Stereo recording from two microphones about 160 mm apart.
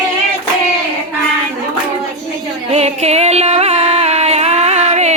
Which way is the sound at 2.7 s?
40° right (ahead or behind).